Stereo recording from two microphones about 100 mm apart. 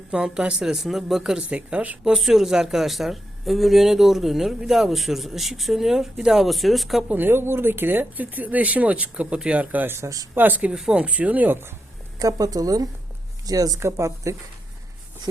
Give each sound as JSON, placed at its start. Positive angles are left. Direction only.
{"t": 0.1, "sound": "speech", "side_deg": -10}
{"t": 2.1, "sound": "speech", "side_deg": -5}
{"t": 7.1, "sound": "speech", "side_deg": -20}
{"t": 10.3, "sound": "speech", "side_deg": -15}
{"t": 12.2, "sound": "speech", "side_deg": -40}